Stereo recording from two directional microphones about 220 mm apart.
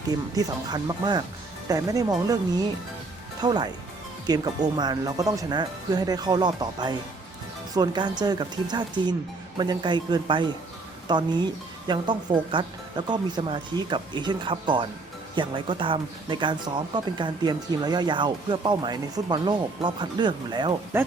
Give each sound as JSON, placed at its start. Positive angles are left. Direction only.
{"t": 0.3, "sound": "speech", "side_deg": -15}